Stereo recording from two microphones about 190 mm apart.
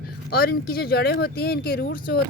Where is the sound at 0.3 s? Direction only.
55° left (ahead or behind).